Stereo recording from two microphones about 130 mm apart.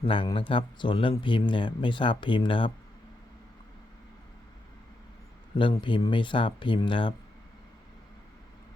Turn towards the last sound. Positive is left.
turn(degrees=40)  # may be behind; listen again after turning